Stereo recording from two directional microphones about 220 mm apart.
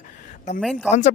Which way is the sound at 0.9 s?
35° left (ahead or behind).